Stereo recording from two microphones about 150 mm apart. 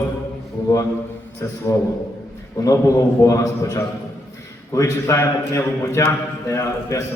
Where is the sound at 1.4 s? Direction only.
20° left (ahead or behind).